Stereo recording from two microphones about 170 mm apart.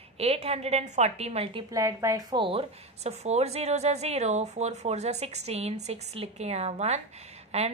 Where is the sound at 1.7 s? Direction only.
20° right (ahead or behind).